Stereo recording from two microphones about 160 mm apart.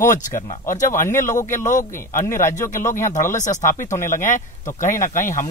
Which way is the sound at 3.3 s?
50° left (ahead or behind).